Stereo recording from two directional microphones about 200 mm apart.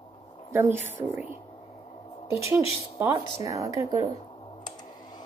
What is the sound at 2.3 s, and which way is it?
A woman's voice, 15° right (ahead or behind).